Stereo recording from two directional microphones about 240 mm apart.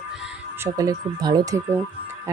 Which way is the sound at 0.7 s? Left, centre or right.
Centre.